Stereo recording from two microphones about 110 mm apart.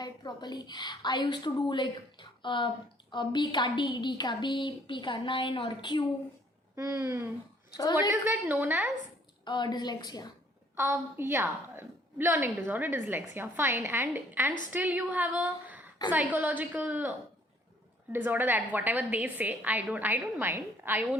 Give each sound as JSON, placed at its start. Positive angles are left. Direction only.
{"t": 0.0, "sound": "a woman's voice", "side_deg": 40}
{"t": 6.7, "sound": "a woman's voice", "side_deg": -30}
{"t": 9.4, "sound": "a woman's voice", "side_deg": 45}
{"t": 10.8, "sound": "a woman's voice", "side_deg": -20}